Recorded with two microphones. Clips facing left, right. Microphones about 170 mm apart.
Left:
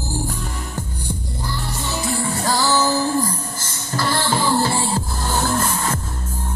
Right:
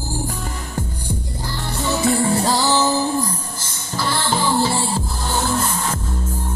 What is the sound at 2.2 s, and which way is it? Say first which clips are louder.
Music: right 3 dB; 30° right (ahead or behind).